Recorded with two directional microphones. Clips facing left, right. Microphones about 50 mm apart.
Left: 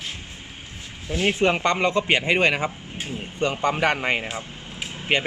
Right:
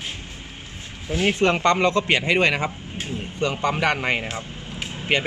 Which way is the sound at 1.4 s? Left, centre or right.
Centre.